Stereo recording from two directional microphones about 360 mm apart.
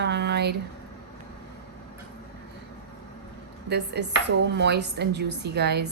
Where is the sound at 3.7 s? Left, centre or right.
Right.